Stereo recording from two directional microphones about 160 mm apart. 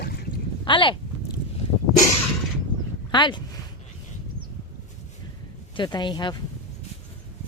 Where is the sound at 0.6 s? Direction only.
30° left (ahead or behind).